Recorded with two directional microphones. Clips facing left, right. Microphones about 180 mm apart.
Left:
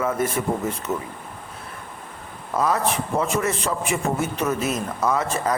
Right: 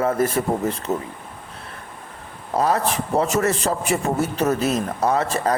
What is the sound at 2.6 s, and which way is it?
A man's voice, 30° right (ahead or behind).